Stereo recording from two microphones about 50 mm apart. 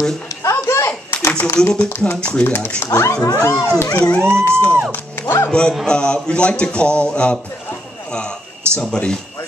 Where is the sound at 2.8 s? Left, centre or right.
Left.